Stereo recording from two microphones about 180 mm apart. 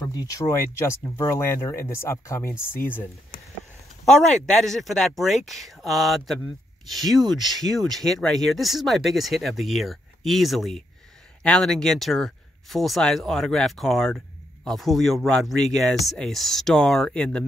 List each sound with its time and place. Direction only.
0.1 s speech: 20° left (ahead or behind)